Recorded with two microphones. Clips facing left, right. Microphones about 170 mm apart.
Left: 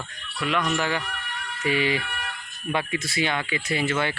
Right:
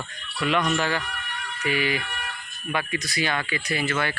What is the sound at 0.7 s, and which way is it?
Speech, 15° left (ahead or behind).